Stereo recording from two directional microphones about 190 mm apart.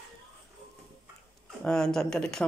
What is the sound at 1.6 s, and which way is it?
Speech, 5° left (ahead or behind).